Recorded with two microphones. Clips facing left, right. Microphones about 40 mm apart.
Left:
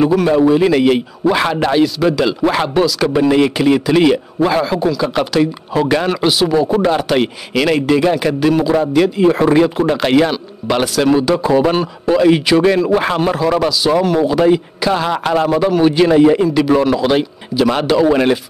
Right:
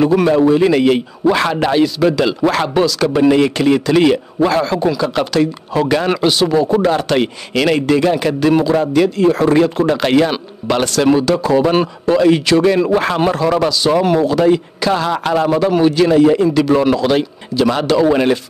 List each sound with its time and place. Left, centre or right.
0.3 s a man's voice: centre
2.4 s a man's voice: centre
2.7 s a man's voice: centre
11.4 s a man's voice: centre